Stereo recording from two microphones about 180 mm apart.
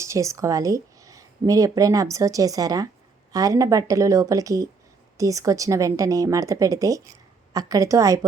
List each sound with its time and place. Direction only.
0.0 s a woman's voice: 15° right (ahead or behind)